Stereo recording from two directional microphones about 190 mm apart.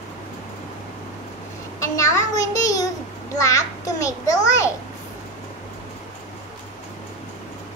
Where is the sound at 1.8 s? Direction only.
15° left (ahead or behind).